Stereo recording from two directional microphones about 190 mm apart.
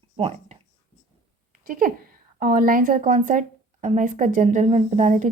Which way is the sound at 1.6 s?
50° right (ahead or behind).